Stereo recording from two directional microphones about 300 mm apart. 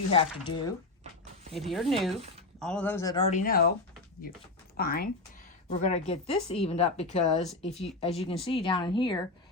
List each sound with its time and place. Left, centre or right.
0.1 s speech: centre
1.5 s speech: centre; by 3.7 s left
4.8 s speech: left